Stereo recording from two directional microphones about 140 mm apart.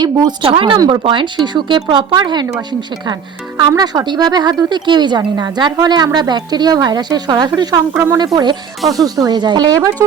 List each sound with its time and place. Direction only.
0.0 s speech: 35° right (ahead or behind)
3.6 s speech: 30° right (ahead or behind)
7.9 s speech: 20° right (ahead or behind)
8.2 s speech: 30° right (ahead or behind)
8.8 s speech: centre (ahead or behind)
9.0 s speech: 25° right (ahead or behind)